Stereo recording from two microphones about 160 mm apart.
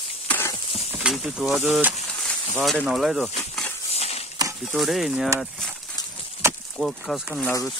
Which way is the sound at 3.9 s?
40° left (ahead or behind).